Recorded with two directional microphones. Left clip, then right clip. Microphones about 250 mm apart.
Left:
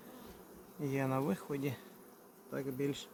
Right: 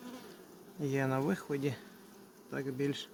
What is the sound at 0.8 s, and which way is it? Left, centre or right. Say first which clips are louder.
Speech: right 2 dB; centre.